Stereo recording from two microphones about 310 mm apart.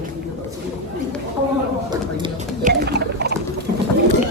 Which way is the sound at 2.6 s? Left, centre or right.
Right.